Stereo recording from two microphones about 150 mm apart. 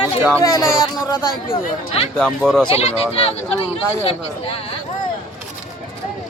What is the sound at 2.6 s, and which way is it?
Speech, 45° left (ahead or behind).